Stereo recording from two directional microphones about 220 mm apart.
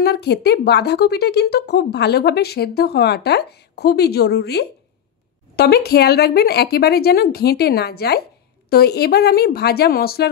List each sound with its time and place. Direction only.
0.0 s a woman's voice: 45° left (ahead or behind)